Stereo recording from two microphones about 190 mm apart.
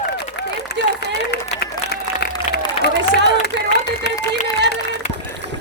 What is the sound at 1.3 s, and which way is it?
Applause, 60° left (ahead or behind).